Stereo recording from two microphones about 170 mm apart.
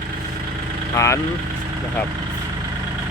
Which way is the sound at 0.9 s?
15° left (ahead or behind).